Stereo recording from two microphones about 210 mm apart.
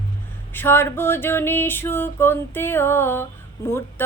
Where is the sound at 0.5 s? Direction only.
10° left (ahead or behind).